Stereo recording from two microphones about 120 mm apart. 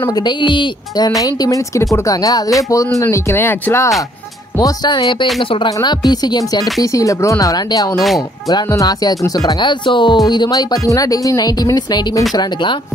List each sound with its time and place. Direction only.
0.1 s speech: 40° left (ahead or behind); by 3.9 s 20° left (ahead or behind)
4.6 s speech: 35° left (ahead or behind)
5.7 s speech: 35° left (ahead or behind)